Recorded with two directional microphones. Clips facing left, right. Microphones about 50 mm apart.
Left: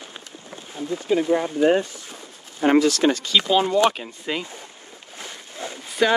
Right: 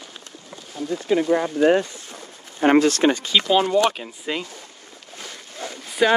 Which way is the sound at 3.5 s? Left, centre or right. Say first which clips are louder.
Even; centre.